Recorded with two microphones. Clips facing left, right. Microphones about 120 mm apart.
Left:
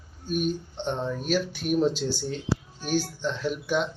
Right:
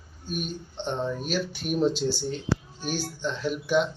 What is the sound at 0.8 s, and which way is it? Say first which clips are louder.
Speech: right 1 dB; 5° left (ahead or behind).